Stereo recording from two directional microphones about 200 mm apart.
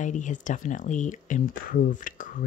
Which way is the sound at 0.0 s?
40° left (ahead or behind).